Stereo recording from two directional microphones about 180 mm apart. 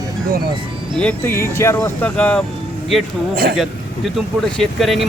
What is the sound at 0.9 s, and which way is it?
Speech, 10° left (ahead or behind).